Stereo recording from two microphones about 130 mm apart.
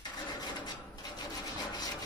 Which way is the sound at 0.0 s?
35° left (ahead or behind).